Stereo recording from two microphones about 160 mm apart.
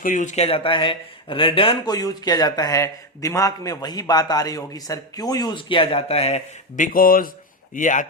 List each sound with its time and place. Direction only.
0.0 s a man's voice: 55° left (ahead or behind)